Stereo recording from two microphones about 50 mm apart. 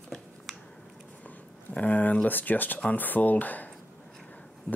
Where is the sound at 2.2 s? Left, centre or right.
Left.